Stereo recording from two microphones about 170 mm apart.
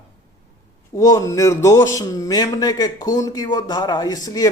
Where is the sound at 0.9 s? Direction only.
20° left (ahead or behind).